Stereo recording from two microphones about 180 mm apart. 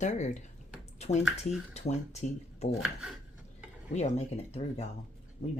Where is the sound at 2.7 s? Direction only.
5° right (ahead or behind).